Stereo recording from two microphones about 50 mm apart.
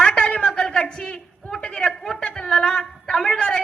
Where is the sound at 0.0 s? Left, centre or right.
Left.